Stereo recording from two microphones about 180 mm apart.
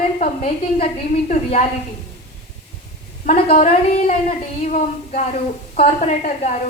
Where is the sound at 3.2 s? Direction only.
40° left (ahead or behind).